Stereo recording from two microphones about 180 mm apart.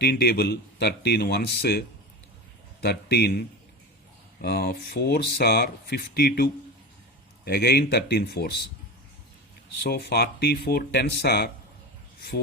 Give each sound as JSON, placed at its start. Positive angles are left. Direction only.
{"t": 0.0, "sound": "speech", "side_deg": 60}
{"t": 2.8, "sound": "speech", "side_deg": 65}
{"t": 9.8, "sound": "speech", "side_deg": 65}